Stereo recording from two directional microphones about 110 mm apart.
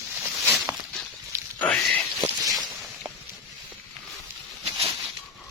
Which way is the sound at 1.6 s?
15° left (ahead or behind).